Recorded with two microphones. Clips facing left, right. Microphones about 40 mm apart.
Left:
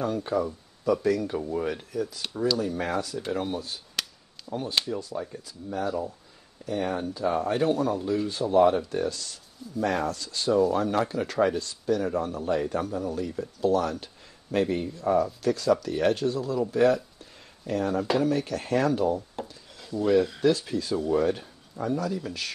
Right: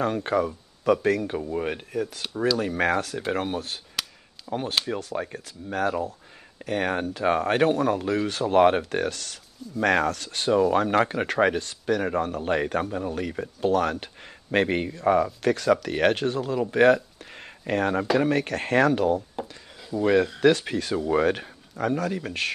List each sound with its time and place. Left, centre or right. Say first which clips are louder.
0.0 s speech: right 3 dB; right
1.5 s speech: right 1 dB; right
2.3 s speech: right 2 dB; centre
2.8 s speech: right 5 dB; right
7.9 s speech: right 2 dB; right
19.9 s speech: right 3 dB; centre
20.3 s speech: right 3 dB; right